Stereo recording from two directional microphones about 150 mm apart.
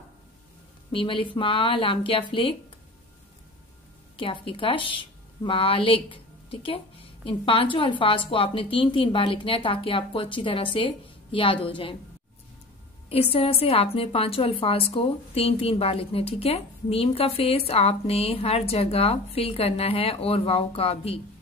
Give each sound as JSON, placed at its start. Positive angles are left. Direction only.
{"t": 0.9, "sound": "a woman's voice", "side_deg": 35}
{"t": 4.2, "sound": "a woman's voice", "side_deg": 35}
{"t": 13.1, "sound": "a woman's voice", "side_deg": 40}